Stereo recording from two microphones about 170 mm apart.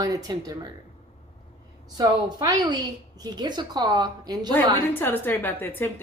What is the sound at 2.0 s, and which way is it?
A woman's voice, 25° right (ahead or behind).